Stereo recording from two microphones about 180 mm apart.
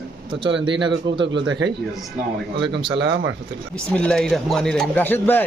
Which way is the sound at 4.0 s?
5° left (ahead or behind).